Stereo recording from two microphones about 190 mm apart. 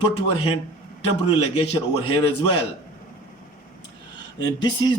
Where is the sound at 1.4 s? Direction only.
30° left (ahead or behind).